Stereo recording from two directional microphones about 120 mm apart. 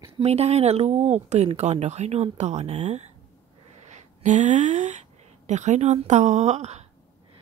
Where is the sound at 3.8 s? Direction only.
85° right.